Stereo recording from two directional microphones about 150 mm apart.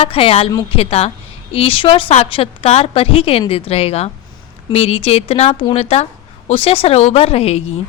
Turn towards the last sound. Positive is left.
turn(degrees=45)  # may be behind; listen again after turning